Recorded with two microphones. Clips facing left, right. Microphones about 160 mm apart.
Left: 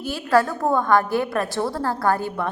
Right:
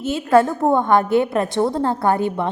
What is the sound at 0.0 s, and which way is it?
A woman's voice, 20° right (ahead or behind).